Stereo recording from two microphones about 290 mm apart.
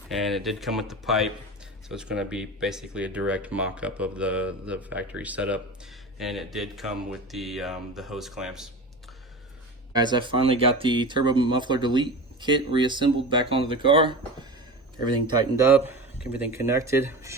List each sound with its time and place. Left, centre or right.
0.1 s speech: centre
9.9 s speech: centre
15.5 s speech: centre